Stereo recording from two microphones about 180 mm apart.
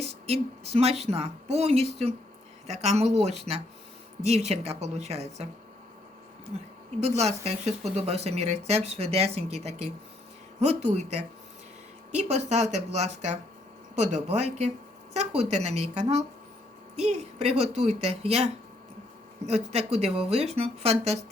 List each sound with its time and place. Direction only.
0.0 s speech: 35° right (ahead or behind)
6.5 s speech: 35° right (ahead or behind)